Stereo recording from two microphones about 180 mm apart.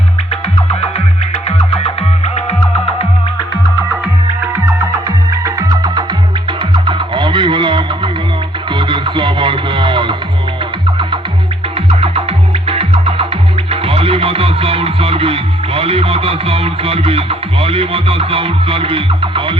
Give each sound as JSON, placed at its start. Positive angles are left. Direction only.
{"t": 0.3, "sound": "music", "side_deg": 35}
{"t": 4.5, "sound": "music", "side_deg": -15}
{"t": 11.9, "sound": "music", "side_deg": -30}